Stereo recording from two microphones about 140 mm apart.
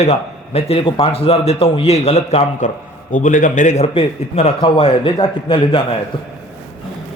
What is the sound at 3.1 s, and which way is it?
A man's voice, 65° left (ahead or behind).